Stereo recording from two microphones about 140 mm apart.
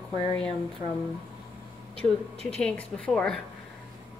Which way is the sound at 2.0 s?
45° right (ahead or behind).